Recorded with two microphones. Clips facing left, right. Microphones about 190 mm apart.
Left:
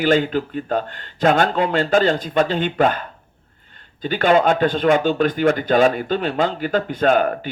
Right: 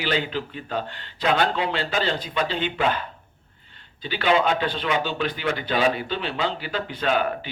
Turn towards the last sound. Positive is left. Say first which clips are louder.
# left 7 dB
turn(degrees=45)  # may be behind; listen again after turning